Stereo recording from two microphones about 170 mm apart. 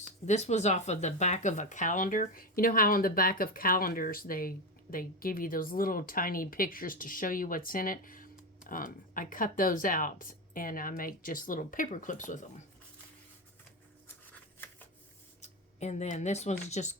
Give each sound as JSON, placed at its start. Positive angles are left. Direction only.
{"t": 0.3, "sound": "speech", "side_deg": 40}
{"t": 15.4, "sound": "speech", "side_deg": 40}